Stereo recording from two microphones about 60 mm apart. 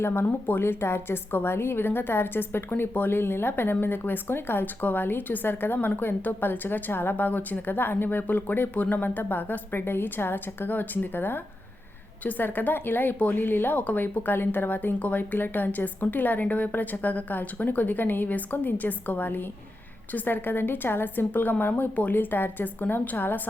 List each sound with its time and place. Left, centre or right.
0.0 s a woman's voice: left